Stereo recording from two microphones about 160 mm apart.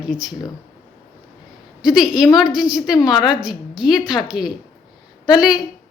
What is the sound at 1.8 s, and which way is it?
Speech, 5° right (ahead or behind).